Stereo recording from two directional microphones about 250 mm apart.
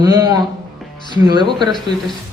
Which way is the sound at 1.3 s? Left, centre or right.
Centre.